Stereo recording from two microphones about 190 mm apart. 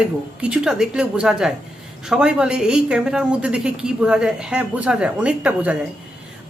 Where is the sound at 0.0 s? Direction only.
5° right (ahead or behind).